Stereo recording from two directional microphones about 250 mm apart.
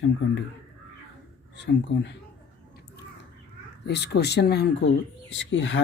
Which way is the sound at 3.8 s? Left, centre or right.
Left.